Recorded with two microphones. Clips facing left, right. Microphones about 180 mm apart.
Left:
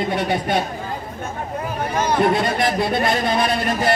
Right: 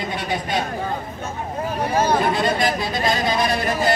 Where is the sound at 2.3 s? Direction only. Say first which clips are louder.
Left 1 dB; 60° left (ahead or behind).